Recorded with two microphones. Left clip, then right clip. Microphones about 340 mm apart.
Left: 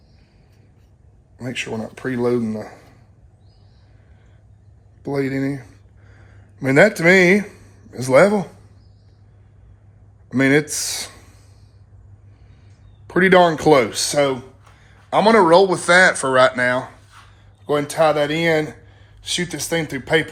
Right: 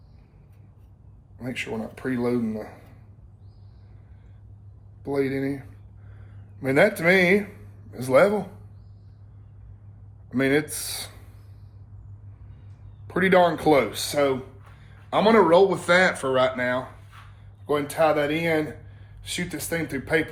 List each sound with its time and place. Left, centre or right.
1.4 s speech: left
5.0 s speech: left
10.2 s speech: left
13.1 s speech: left